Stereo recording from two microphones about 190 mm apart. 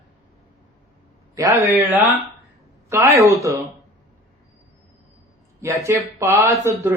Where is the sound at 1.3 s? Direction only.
15° right (ahead or behind).